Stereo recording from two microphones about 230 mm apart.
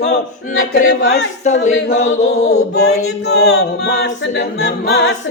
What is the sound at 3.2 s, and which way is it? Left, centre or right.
A capella, left.